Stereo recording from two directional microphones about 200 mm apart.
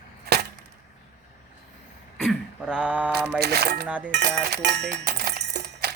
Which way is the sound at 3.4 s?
55° right (ahead or behind).